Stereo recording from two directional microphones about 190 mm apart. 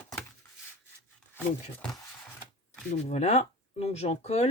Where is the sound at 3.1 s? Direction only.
35° left (ahead or behind).